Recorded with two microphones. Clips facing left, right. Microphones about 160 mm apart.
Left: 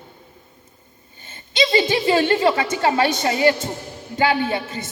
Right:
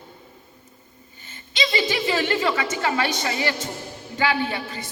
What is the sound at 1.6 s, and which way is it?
A woman's voice, 30° left (ahead or behind).